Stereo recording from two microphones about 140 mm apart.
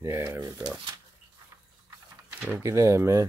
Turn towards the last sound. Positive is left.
turn(degrees=-20)  # may be behind; listen again after turning